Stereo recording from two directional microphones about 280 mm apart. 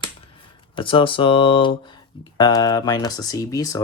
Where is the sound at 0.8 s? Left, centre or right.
Centre.